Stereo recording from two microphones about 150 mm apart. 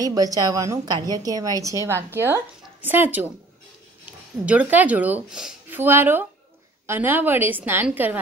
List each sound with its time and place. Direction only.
0.0 s a woman's voice: 25° right (ahead or behind)
4.5 s speech: 10° right (ahead or behind)